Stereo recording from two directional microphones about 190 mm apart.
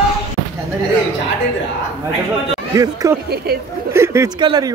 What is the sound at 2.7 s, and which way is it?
Speech, 20° right (ahead or behind).